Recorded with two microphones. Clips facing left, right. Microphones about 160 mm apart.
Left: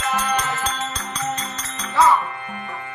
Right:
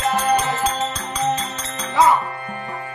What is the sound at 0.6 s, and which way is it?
Music, 30° right (ahead or behind).